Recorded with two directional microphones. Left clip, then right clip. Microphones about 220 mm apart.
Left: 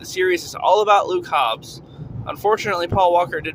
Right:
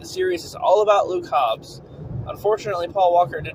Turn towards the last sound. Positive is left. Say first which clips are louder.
# even
turn(degrees=55)  # may be behind; listen again after turning